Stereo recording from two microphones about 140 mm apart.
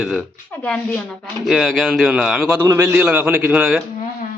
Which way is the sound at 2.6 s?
20° right (ahead or behind).